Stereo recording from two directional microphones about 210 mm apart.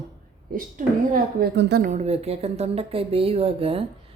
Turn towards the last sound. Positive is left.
turn(degrees=-25)  # may be behind; listen again after turning